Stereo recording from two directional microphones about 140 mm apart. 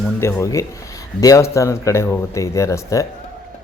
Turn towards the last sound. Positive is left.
turn(degrees=25)  # may be behind; listen again after turning